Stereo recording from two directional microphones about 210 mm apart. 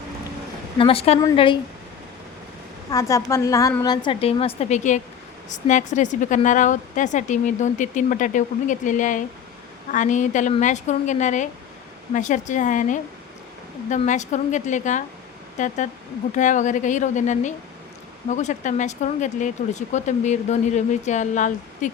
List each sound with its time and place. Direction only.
0.8 s a woman's voice: 25° left (ahead or behind)
2.9 s a woman's voice: 15° left (ahead or behind); by 21.8 s 35° left (ahead or behind)